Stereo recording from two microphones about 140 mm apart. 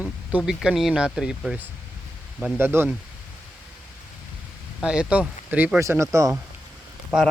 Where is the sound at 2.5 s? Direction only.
15° right (ahead or behind).